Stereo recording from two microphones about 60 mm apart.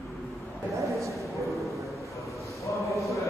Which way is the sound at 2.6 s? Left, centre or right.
Left.